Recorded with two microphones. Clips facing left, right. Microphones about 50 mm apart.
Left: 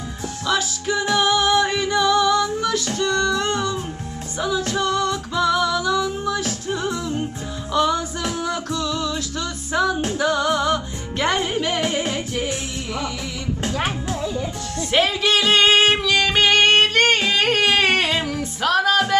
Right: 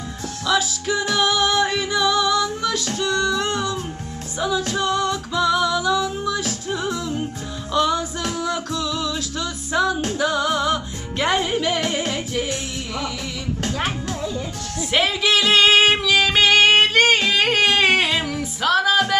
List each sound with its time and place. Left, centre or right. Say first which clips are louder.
0.5 s music: right 1 dB; centre
1.0 s music: left 2 dB; centre
1.3 s music: left 1 dB; centre
5.1 s music: even; centre
13.7 s music: left 1 dB; centre